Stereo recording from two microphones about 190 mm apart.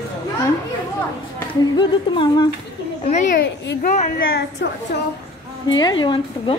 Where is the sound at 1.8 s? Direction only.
25° left (ahead or behind).